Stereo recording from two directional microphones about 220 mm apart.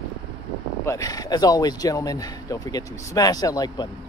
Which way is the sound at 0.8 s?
15° left (ahead or behind).